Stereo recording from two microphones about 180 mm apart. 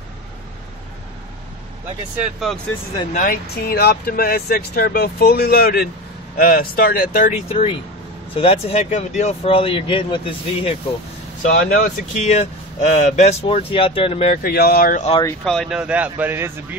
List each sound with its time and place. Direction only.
2.2 s speech: centre (ahead or behind)
3.1 s speech: 45° left (ahead or behind)
3.5 s speech: 60° left (ahead or behind)
7.4 s speech: 30° left (ahead or behind)
11.7 s speech: 50° left (ahead or behind); by 14.4 s 35° left (ahead or behind)
14.4 s speech: 55° left (ahead or behind)
15.4 s speech: centre (ahead or behind)